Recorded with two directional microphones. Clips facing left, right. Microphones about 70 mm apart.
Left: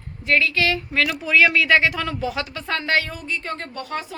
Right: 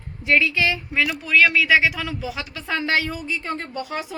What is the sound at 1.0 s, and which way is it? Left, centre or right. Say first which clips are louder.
Speech: even; centre.